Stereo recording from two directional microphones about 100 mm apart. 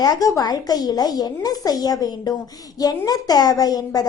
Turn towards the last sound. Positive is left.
turn(degrees=40)  # may be behind; listen again after turning